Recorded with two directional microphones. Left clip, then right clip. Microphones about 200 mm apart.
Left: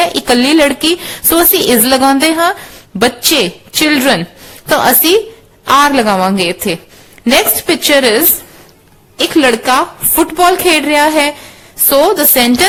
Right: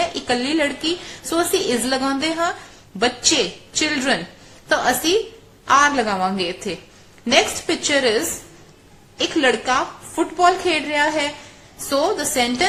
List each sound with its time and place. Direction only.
0.1 s a woman's voice: 50° left (ahead or behind)
5.6 s a woman's voice: 50° left (ahead or behind)